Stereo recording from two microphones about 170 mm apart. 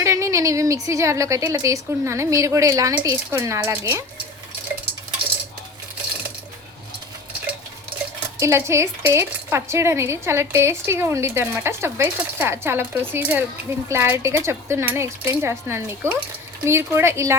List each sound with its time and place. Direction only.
0.0 s speech: 15° right (ahead or behind)
8.4 s speech: 15° right (ahead or behind)